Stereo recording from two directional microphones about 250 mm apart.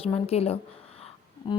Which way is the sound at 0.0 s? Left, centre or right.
Left.